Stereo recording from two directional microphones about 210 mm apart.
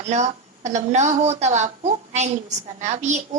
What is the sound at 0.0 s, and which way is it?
A woman's voice, 35° right (ahead or behind).